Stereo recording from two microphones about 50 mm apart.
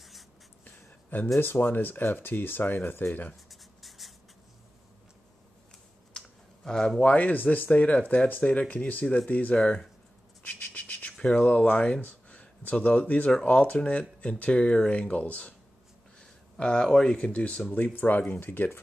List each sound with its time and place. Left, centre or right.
0.7 s a sound: left
1.4 s speech: left
3.4 s writing: centre
6.1 s clicking: centre
7.0 s speech: left
9.6 s speech: centre
10.4 s a sound: left
11.3 s speech: left
17.9 s speech: left